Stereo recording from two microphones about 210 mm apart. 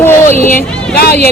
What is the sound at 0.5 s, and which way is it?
Speech, 45° left (ahead or behind).